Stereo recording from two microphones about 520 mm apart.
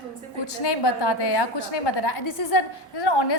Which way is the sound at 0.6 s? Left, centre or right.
Left.